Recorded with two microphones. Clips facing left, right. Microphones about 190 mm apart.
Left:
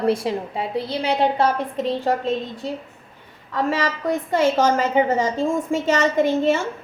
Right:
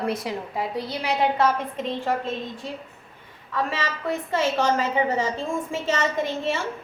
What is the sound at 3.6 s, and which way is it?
A woman's voice, 45° left (ahead or behind).